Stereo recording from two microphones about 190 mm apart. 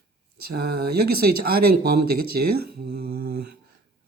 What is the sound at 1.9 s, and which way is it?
Speech, 55° right (ahead or behind).